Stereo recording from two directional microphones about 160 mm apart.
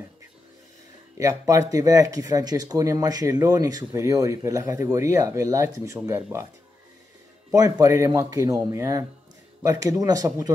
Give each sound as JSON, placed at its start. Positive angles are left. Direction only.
{"t": 1.1, "sound": "speech", "side_deg": -20}
{"t": 7.8, "sound": "speech", "side_deg": -20}